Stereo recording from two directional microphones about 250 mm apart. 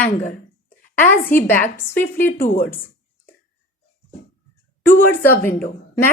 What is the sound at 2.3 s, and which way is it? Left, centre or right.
Speech, left.